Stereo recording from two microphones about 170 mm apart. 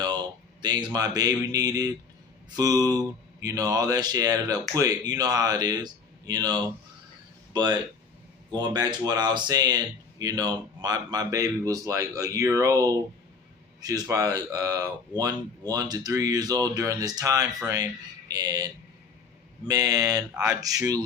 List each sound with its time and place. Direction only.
0.6 s a man's voice: 25° right (ahead or behind)
20.3 s speech: 5° right (ahead or behind)
20.6 s speech: 20° right (ahead or behind)